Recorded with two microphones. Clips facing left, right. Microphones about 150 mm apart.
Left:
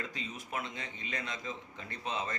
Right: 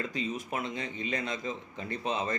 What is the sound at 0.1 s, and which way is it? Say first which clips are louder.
A man's voice: right 7 dB; 20° right (ahead or behind).